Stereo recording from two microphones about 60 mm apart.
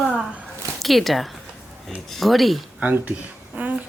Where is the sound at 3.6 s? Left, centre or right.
Right.